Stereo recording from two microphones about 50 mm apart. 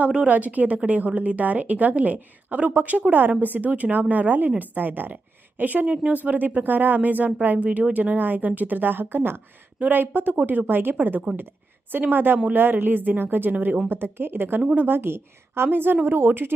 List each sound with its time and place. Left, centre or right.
0.3 s speech: right
5.8 s a woman's voice: right